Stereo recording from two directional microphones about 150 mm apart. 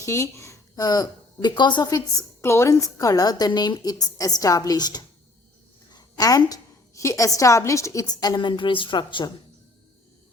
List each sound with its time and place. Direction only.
0.0 s a woman's voice: 20° left (ahead or behind)
5.9 s a sound: 25° left (ahead or behind)
7.3 s a woman's voice: 20° left (ahead or behind)